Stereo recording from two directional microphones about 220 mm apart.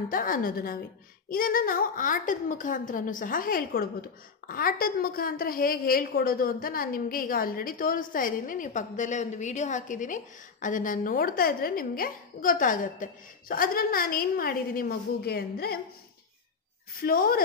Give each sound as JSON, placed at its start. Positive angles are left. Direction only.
{"t": 0.1, "sound": "a woman's voice", "side_deg": 40}
{"t": 17.0, "sound": "a woman's voice", "side_deg": 40}